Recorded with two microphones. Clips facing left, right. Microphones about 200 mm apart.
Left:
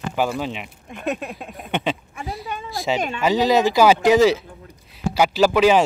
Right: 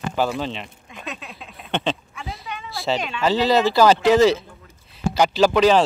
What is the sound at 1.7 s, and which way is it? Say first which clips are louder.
Speech: even; 10° left (ahead or behind).